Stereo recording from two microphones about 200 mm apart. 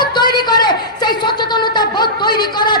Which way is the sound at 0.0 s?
20° left (ahead or behind).